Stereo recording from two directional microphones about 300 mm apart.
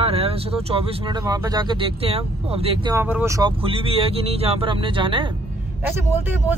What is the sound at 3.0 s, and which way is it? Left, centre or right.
Speech, centre.